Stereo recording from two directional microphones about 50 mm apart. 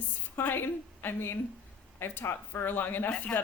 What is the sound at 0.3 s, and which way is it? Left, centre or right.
A woman's voice, left.